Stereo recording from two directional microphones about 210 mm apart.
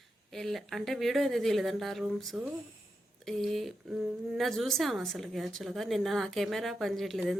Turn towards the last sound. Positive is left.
turn(degrees=0)  # may be behind; listen again after turning